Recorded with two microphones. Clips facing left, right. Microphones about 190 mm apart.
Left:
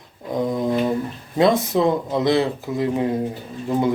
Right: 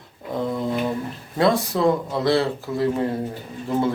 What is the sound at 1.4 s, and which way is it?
A man's voice, 20° left (ahead or behind).